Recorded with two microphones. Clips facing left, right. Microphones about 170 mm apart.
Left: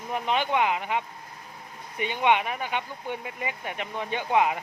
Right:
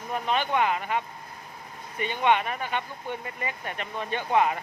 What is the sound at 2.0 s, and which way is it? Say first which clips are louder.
Speech: even; 15° left (ahead or behind).